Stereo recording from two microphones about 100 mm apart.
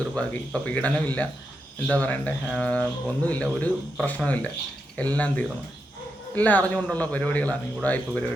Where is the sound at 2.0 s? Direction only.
15° left (ahead or behind).